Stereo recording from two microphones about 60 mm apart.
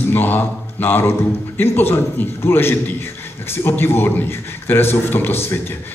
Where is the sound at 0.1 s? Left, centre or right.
Left.